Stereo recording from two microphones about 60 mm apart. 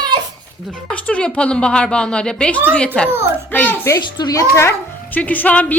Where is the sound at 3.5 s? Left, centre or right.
Left.